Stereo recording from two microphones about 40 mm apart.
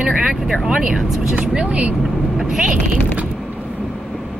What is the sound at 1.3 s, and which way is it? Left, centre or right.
Speech, right.